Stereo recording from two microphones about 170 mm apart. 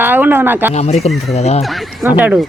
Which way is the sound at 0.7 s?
40° left (ahead or behind).